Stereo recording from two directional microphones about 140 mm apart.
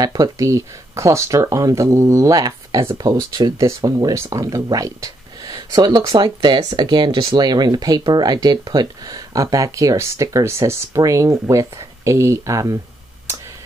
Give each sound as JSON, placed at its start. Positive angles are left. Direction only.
{"t": 0.0, "sound": "speech", "side_deg": -25}